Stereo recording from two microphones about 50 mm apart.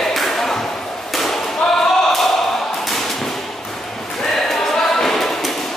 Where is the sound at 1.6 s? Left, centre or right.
Centre.